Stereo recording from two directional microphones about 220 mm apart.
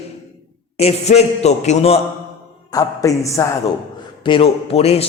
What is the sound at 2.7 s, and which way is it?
Speech, 15° left (ahead or behind).